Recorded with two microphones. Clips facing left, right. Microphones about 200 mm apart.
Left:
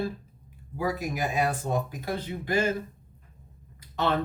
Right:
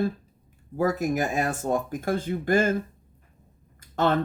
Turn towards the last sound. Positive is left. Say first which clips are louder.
# right 4 dB
turn(degrees=-50)  # may be behind; listen again after turning